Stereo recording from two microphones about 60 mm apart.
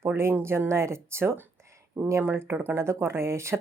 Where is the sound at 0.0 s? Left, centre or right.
Right.